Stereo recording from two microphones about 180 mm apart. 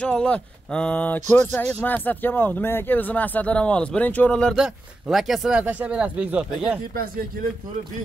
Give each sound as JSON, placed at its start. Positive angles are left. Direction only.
{"t": 0.0, "sound": "speech", "side_deg": 5}
{"t": 6.9, "sound": "speech", "side_deg": -55}